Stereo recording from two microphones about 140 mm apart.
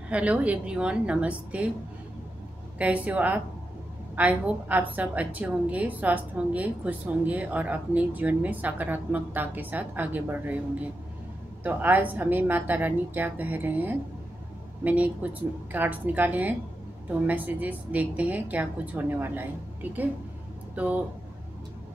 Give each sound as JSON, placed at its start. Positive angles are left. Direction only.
{"t": 0.1, "sound": "a woman's voice", "side_deg": -10}
{"t": 2.8, "sound": "a woman's voice", "side_deg": -10}